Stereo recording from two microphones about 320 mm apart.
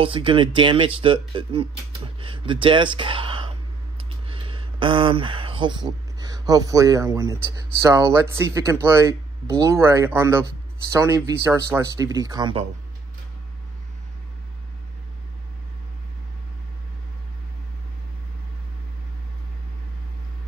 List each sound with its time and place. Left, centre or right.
0.0 s speech: centre